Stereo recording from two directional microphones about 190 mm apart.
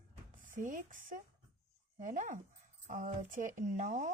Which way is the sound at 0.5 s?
45° right (ahead or behind).